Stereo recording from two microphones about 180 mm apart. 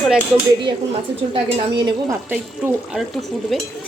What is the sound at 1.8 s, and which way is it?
Speech, 15° right (ahead or behind).